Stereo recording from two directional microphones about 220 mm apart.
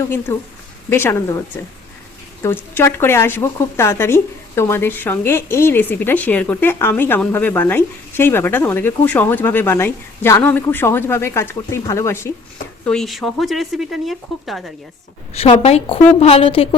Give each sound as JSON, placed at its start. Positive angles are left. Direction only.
{"t": 0.9, "sound": "speech", "side_deg": 10}
{"t": 2.4, "sound": "speech", "side_deg": 10}
{"t": 15.3, "sound": "a woman's voice", "side_deg": 25}